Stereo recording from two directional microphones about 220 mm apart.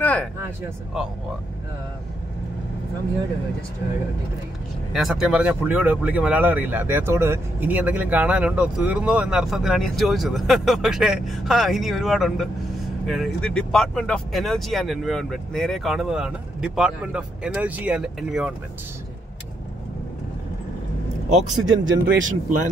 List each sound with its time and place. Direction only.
0.0 s vehicle: 5° left (ahead or behind)
1.0 s speech: 5° right (ahead or behind)
4.9 s speech: centre (ahead or behind)
21.8 s speech: 55° right (ahead or behind)